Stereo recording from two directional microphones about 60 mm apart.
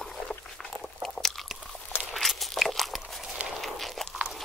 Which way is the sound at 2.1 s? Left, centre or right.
Centre.